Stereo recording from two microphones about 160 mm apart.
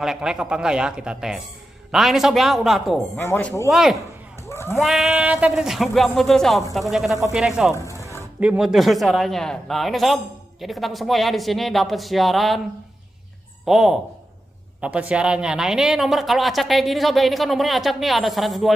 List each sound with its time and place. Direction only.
0.0 s a man's voice: 5° right (ahead or behind)
3.2 s speech: 10° left (ahead or behind)
3.7 s a man's voice: centre (ahead or behind)
4.5 s a sound: 15° left (ahead or behind)
4.8 s a man's voice: centre (ahead or behind)
7.7 s speech: 20° left (ahead or behind)
8.4 s a man's voice: 5° right (ahead or behind)
13.7 s a man's voice: centre (ahead or behind)